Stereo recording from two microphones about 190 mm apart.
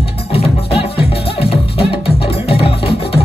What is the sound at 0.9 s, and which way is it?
Music, 30° left (ahead or behind).